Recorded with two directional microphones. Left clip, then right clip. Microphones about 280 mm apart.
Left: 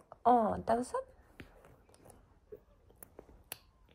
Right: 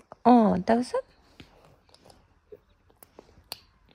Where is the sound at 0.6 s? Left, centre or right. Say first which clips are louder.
Right 8 dB; right.